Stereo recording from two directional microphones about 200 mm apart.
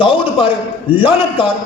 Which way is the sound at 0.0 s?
25° left (ahead or behind).